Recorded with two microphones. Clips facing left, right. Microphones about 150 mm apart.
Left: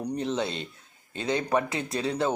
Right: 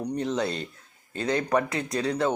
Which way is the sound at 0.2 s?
25° left (ahead or behind).